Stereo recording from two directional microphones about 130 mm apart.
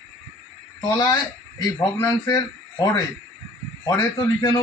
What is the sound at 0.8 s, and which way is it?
A man's voice, 30° left (ahead or behind).